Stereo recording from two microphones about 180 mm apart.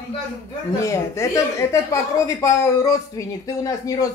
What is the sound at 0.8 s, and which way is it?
A woman's voice, 15° left (ahead or behind).